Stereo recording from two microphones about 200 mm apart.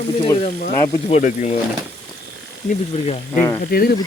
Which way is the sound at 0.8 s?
30° left (ahead or behind).